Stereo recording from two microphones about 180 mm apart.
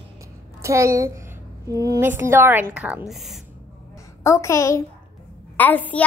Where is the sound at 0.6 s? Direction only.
15° right (ahead or behind).